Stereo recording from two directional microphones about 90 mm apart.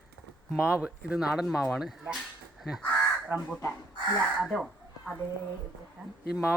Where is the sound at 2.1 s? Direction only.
Centre (ahead or behind).